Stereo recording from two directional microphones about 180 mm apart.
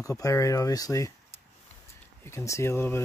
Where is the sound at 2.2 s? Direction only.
15° left (ahead or behind).